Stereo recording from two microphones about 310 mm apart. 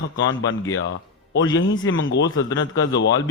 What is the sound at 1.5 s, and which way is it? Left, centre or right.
Speech, left.